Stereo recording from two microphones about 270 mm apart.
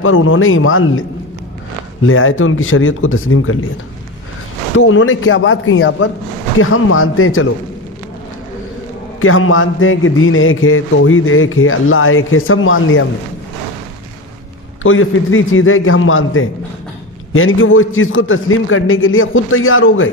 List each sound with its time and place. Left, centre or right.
0.0 s speech: left
2.0 s speech: left
4.7 s speech: left
9.2 s speech: left
14.8 s speech: left